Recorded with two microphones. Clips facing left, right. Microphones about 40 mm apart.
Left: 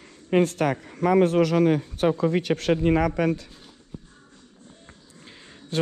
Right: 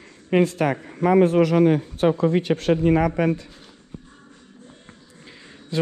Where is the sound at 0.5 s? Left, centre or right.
Right.